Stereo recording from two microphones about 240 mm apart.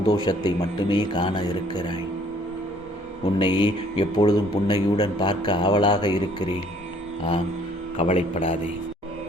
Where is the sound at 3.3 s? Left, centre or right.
Centre.